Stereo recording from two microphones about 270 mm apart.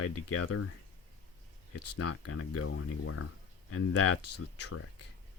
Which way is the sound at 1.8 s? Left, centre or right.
Left.